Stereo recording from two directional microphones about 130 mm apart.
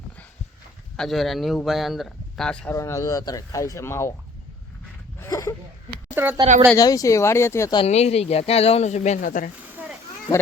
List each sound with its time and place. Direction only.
0.9 s speech: centre (ahead or behind)
2.7 s speech: 25° left (ahead or behind)
5.3 s speech: 25° left (ahead or behind)
6.2 s speech: 15° right (ahead or behind)
6.7 s speech: 30° left (ahead or behind)
7.9 s speech: 55° left (ahead or behind); by 9.5 s 90° left
9.7 s a sound: 15° right (ahead or behind)
10.3 s speech: 45° left (ahead or behind)